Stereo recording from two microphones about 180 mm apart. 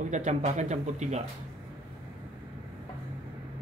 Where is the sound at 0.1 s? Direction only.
40° right (ahead or behind).